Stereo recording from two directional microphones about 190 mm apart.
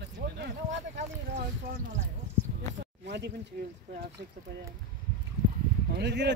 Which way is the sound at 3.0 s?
65° right (ahead or behind).